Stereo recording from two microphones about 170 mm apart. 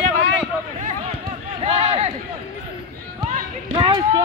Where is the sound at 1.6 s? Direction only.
35° right (ahead or behind).